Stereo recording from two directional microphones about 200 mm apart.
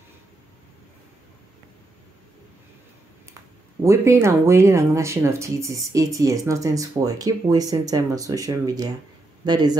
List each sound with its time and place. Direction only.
3.8 s speech: 15° right (ahead or behind)